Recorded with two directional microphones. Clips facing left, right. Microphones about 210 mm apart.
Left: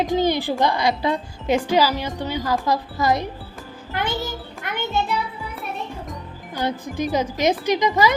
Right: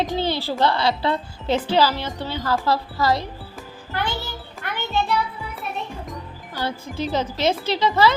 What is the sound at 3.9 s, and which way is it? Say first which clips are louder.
Child singing: left 2 dB; 20° left (ahead or behind).